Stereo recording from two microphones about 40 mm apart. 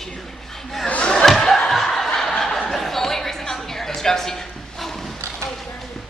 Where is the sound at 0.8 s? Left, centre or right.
Left.